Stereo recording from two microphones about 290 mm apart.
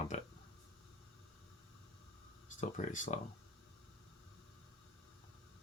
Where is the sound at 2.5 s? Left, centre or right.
Left.